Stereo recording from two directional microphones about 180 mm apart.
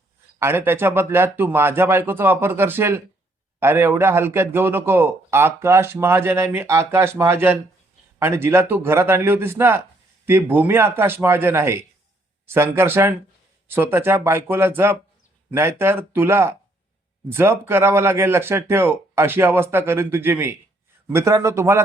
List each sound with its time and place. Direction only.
0.3 s a man's voice: 15° right (ahead or behind)